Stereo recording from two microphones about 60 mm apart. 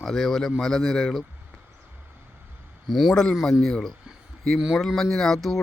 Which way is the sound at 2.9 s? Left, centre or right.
Centre.